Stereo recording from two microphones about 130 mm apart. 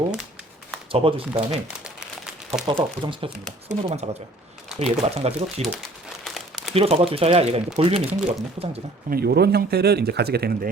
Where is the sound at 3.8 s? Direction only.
50° right (ahead or behind).